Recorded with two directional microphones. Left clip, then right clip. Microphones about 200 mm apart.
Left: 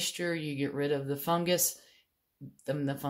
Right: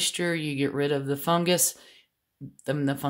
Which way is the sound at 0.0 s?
35° right (ahead or behind).